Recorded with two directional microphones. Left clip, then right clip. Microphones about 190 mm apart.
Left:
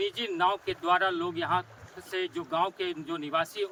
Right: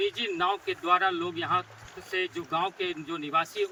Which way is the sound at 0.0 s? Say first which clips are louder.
Even; 25° left (ahead or behind).